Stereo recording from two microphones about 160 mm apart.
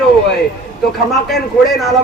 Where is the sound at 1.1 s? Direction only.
Centre (ahead or behind).